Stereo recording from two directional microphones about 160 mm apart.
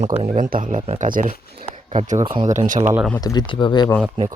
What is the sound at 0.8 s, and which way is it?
Speech, 40° right (ahead or behind).